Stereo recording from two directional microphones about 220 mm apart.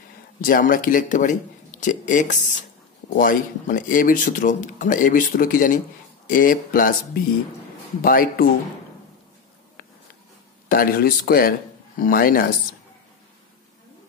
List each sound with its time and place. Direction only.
0.4 s speech: 40° left (ahead or behind)
8.0 s speech: 40° left (ahead or behind)
10.7 s speech: 40° left (ahead or behind)